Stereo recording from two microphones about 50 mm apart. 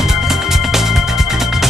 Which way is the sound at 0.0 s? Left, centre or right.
Centre.